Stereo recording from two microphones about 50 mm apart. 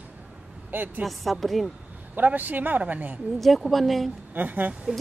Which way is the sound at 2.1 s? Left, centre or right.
Right.